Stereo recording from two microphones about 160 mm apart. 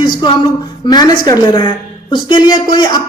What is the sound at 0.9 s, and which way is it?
A woman's voice, 25° left (ahead or behind).